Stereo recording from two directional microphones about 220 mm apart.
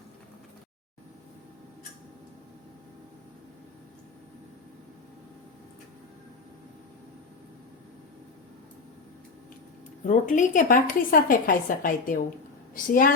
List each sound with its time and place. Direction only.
10.1 s a woman's voice: 35° left (ahead or behind)